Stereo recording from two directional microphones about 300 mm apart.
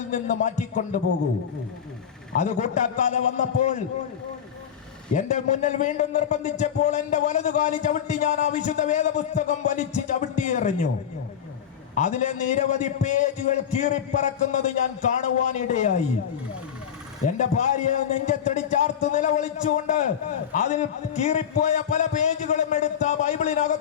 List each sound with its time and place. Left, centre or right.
0.1 s a man's voice: left
2.3 s a man's voice: left
5.1 s a man's voice: left
11.9 s a man's voice: left
17.2 s a man's voice: left